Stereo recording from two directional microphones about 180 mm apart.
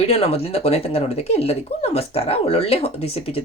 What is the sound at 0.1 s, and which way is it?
Speech, 35° left (ahead or behind).